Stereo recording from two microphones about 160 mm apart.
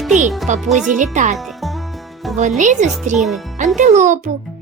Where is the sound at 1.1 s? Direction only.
50° right (ahead or behind).